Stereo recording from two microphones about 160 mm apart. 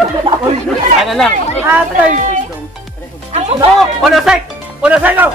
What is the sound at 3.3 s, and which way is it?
Speech, 40° right (ahead or behind).